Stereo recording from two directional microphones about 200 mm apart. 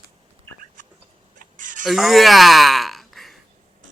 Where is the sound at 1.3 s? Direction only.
40° right (ahead or behind).